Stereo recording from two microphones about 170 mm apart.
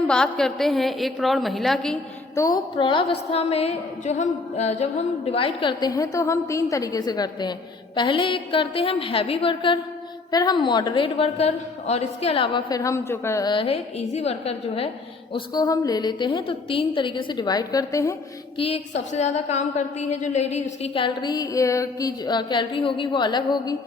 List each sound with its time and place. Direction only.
0.1 s a woman's voice: 5° left (ahead or behind)
2.3 s a woman's voice: 20° left (ahead or behind)
2.7 s a woman's voice: 30° left (ahead or behind)
18.5 s a woman's voice: 35° left (ahead or behind)